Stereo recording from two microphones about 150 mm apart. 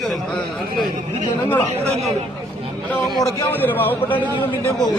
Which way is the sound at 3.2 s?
25° left (ahead or behind).